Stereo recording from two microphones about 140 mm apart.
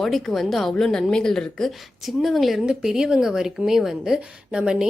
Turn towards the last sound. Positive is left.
turn(degrees=-5)  # may be behind; listen again after turning